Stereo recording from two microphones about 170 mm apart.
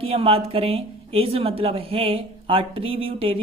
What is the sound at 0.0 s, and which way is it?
Speech, 35° right (ahead or behind).